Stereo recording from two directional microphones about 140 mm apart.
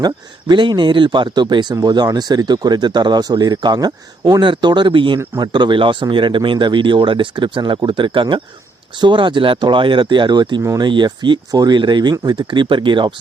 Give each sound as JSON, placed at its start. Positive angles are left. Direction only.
{"t": 0.0, "sound": "speech", "side_deg": -30}
{"t": 10.6, "sound": "speech", "side_deg": -20}
{"t": 10.8, "sound": "speech", "side_deg": -35}